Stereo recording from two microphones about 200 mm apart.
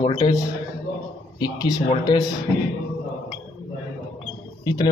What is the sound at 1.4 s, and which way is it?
Speech, 20° left (ahead or behind).